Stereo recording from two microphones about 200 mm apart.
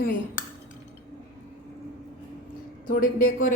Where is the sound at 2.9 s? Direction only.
45° left (ahead or behind).